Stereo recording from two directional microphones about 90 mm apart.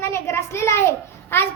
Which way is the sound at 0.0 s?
30° left (ahead or behind).